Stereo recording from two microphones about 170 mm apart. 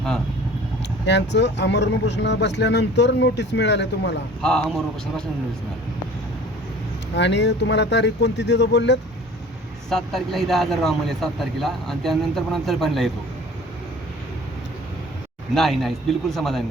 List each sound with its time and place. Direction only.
1.0 s speech: 90° left
4.4 s a man's voice: 5° left (ahead or behind)
7.2 s speech: 90° left
9.9 s a man's voice: centre (ahead or behind)
15.5 s a man's voice: centre (ahead or behind)